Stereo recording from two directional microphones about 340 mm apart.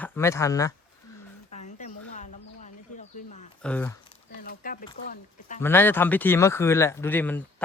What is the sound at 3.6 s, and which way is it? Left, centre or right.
Speech, centre.